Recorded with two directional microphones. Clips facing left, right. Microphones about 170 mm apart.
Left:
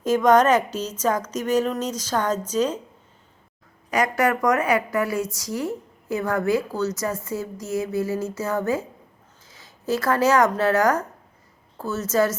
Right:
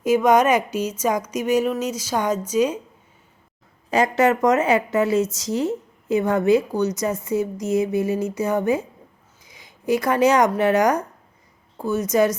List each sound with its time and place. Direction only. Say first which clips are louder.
0.0 s speech: right 1 dB; 10° right (ahead or behind)
3.8 s a woman's voice: right 3 dB; 25° right (ahead or behind)